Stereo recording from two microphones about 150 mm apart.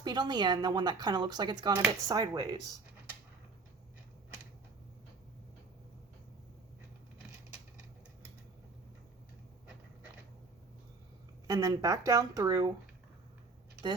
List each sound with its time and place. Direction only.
0.0 s speech: 30° right (ahead or behind)
11.4 s speech: 20° right (ahead or behind)